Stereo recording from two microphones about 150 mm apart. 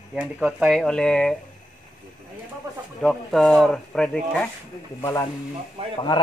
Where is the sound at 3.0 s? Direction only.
5° left (ahead or behind).